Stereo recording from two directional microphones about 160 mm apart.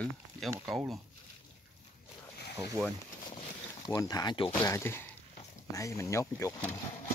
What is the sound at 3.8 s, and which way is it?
Speech, 25° left (ahead or behind).